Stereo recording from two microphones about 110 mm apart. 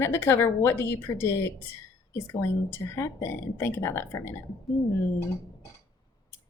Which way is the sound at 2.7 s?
25° left (ahead or behind).